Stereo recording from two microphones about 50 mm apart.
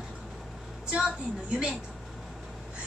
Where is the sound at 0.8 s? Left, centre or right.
Right.